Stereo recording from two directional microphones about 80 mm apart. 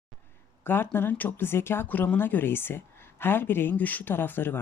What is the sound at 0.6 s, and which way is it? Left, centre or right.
Speech, left.